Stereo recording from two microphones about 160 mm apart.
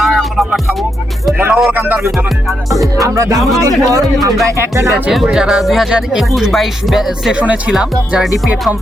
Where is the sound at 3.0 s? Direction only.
20° right (ahead or behind).